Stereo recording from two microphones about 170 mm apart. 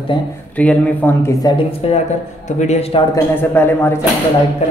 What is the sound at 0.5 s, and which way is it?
Speech, 10° left (ahead or behind).